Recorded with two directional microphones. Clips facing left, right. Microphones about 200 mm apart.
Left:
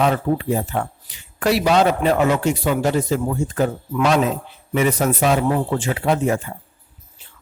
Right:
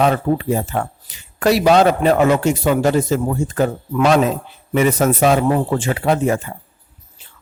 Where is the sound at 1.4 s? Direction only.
40° right (ahead or behind).